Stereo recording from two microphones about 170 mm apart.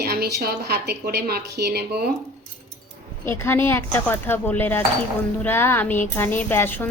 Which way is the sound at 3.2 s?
15° left (ahead or behind).